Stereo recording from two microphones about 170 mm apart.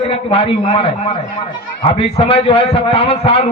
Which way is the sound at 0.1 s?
35° left (ahead or behind).